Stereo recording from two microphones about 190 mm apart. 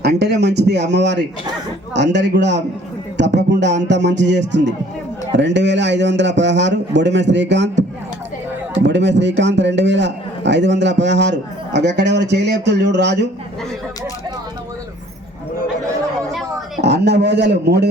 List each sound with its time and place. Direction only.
0.0 s a man's voice: 60° right (ahead or behind)
16.8 s speech: 65° right (ahead or behind)